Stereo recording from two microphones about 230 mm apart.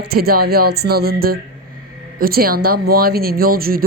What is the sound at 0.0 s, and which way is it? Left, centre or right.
A woman's voice, right.